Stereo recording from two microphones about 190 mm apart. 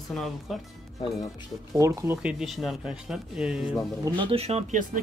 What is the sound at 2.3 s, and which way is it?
Speech, centre (ahead or behind).